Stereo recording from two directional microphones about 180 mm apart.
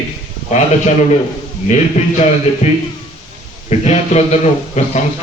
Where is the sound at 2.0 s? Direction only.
40° left (ahead or behind).